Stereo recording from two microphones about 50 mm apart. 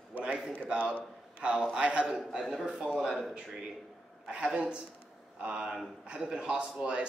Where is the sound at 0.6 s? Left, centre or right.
Right.